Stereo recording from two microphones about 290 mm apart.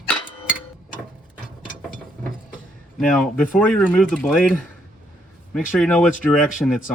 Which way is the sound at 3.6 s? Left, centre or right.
Centre.